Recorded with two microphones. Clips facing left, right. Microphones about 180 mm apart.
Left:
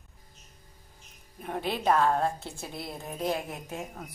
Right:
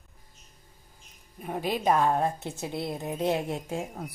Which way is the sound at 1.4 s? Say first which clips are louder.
Right 2 dB; 10° right (ahead or behind).